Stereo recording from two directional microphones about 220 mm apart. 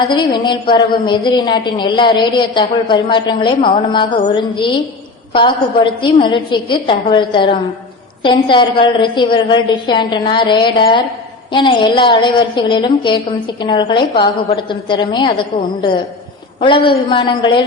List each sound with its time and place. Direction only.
0.1 s a woman's voice: 20° left (ahead or behind)
5.3 s a woman's voice: 20° left (ahead or behind)